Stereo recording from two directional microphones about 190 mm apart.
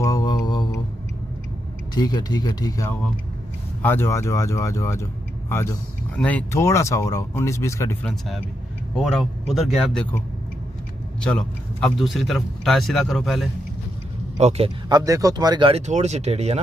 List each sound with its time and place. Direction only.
0.0 s mantra: 20° left (ahead or behind)
2.0 s speech: 20° left (ahead or behind); by 10.0 s centre (ahead or behind)
11.1 s speech: 5° left (ahead or behind)
14.4 s speech: 25° right (ahead or behind)